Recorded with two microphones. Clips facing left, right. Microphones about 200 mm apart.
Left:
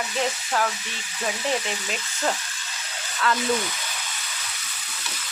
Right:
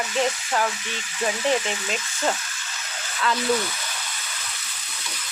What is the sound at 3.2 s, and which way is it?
Speech, centre (ahead or behind).